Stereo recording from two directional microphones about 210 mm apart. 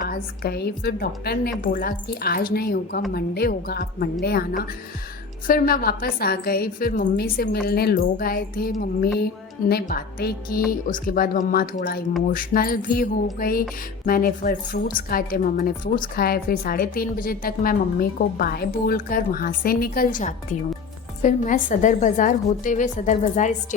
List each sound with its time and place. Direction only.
0.0 s a woman's voice: 45° left (ahead or behind)